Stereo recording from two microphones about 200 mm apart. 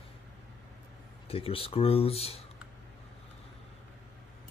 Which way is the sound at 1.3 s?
30° left (ahead or behind).